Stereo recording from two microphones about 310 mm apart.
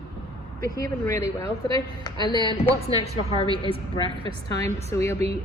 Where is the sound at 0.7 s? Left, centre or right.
Centre.